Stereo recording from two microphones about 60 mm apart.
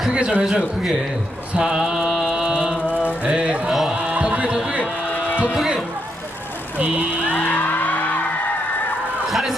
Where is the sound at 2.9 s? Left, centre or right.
Left.